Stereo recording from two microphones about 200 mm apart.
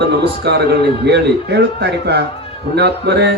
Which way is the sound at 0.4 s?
55° right (ahead or behind).